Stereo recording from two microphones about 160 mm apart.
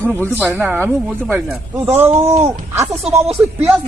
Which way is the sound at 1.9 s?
15° right (ahead or behind).